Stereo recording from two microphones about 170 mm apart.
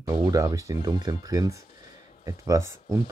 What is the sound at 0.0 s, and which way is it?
Speech, 20° right (ahead or behind).